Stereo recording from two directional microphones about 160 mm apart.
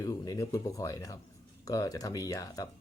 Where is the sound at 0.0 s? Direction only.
20° left (ahead or behind).